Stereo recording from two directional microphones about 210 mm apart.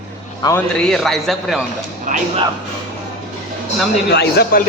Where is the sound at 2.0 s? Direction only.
35° right (ahead or behind).